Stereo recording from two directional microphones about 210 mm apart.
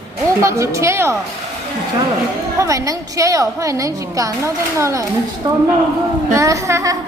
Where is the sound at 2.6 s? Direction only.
15° right (ahead or behind).